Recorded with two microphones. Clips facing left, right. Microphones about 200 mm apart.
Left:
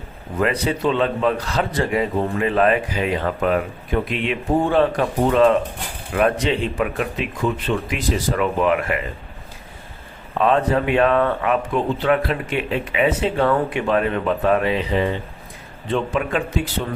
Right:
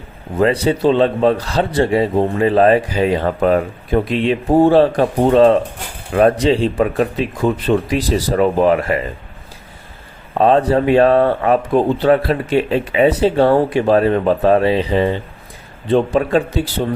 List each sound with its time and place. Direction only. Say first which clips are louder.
0.3 s a man's voice: right 6 dB; 30° right (ahead or behind)
10.4 s a man's voice: right 5 dB; 35° right (ahead or behind)